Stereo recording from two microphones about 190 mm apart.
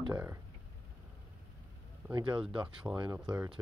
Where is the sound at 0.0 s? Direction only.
15° right (ahead or behind).